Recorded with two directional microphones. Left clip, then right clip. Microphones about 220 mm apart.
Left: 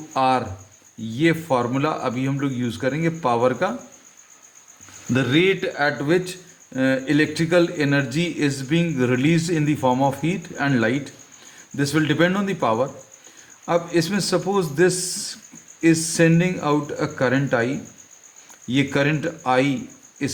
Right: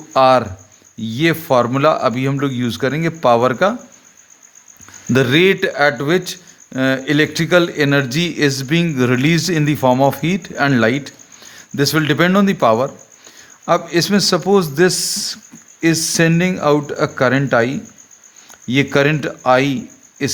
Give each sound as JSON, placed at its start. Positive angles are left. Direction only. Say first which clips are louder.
{"t": 0.1, "sound": "speech", "louder": "right 8 dB", "side_deg": -45}
{"t": 5.1, "sound": "speech", "louder": "right 6 dB", "side_deg": -45}